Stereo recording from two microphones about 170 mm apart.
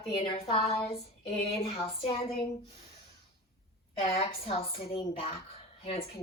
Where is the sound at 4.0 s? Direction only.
35° left (ahead or behind).